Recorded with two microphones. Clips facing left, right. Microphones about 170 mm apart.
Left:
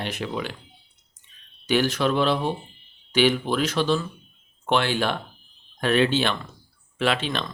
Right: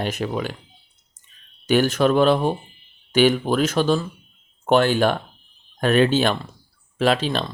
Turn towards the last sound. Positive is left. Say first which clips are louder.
# right 5 dB
turn(degrees=-35)  # may be behind; listen again after turning